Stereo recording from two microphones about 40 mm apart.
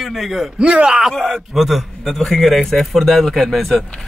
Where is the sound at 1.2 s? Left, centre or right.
Centre.